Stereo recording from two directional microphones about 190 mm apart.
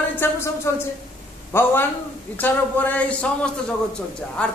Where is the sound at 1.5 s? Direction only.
10° left (ahead or behind).